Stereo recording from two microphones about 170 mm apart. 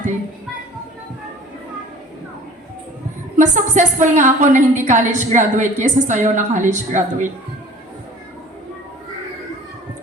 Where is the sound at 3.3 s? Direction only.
45° right (ahead or behind).